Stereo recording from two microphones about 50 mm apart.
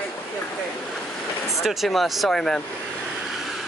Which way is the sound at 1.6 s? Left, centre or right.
Centre.